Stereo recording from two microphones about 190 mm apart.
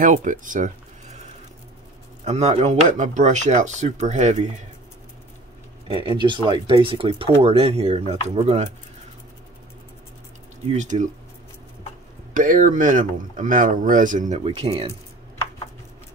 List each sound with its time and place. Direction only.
0.0 s speech: 40° right (ahead or behind)
2.2 s speech: 35° right (ahead or behind)
5.9 s speech: 25° right (ahead or behind)
10.7 s speech: 40° right (ahead or behind)
12.4 s speech: 45° right (ahead or behind)